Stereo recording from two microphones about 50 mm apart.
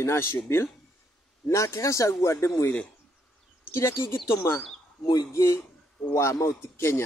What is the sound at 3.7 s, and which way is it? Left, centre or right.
Speech, left.